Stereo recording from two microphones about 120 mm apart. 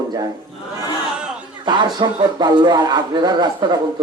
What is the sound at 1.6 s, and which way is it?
Speech, 40° right (ahead or behind).